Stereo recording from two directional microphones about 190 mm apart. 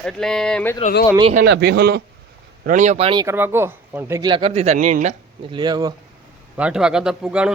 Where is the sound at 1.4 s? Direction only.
60° right (ahead or behind).